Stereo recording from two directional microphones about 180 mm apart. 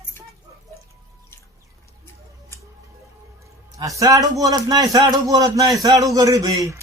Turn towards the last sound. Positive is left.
turn(degrees=-20)  # may be behind; listen again after turning